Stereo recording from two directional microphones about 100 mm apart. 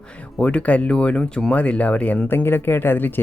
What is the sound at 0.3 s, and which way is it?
Speech, 10° left (ahead or behind).